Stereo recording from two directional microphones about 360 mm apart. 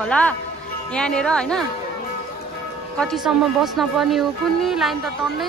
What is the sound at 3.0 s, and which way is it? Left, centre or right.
Speech, centre.